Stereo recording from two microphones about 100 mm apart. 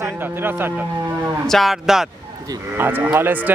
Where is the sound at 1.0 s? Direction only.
30° right (ahead or behind).